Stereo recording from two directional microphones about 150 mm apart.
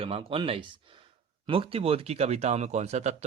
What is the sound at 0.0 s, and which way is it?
A man's voice, 40° right (ahead or behind).